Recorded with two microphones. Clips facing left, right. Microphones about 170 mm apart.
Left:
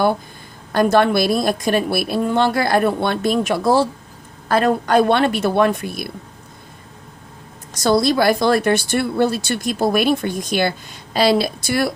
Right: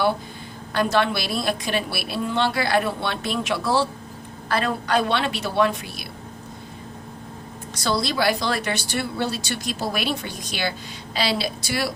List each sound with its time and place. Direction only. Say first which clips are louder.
0.7 s a woman's voice: left 7 dB; 45° left (ahead or behind)
7.7 s a woman's voice: left 9 dB; 45° left (ahead or behind)